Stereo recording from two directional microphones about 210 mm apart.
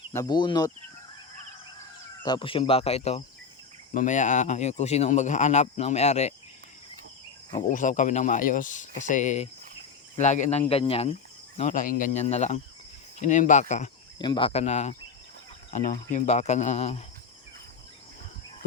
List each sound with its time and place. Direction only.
0.1 s speech: 15° left (ahead or behind)
2.2 s a man's voice: 20° left (ahead or behind)
7.7 s a man's voice: 40° left (ahead or behind)
11.5 s a man's voice: 35° left (ahead or behind)
14.2 s a man's voice: 20° left (ahead or behind)